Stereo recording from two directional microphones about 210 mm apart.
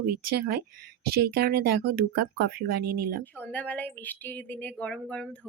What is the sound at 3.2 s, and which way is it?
A woman's voice, 10° left (ahead or behind).